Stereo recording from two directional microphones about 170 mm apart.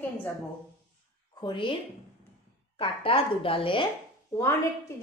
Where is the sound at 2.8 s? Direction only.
30° left (ahead or behind).